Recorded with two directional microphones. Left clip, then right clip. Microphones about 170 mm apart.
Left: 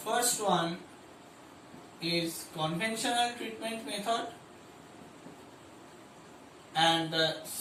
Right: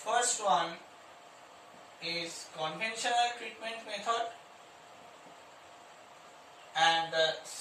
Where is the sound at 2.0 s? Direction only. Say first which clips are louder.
Left 4 dB; centre (ahead or behind).